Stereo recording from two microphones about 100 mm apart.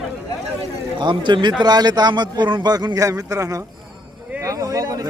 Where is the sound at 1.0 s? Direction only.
50° right (ahead or behind).